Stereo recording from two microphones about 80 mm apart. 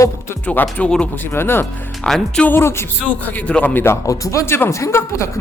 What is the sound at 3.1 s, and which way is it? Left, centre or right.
Speech, centre.